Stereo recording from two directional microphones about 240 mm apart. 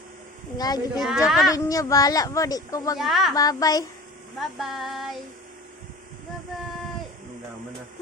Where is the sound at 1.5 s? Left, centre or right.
Centre.